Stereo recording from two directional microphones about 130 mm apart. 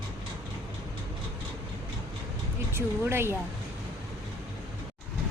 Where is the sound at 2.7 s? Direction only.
20° right (ahead or behind).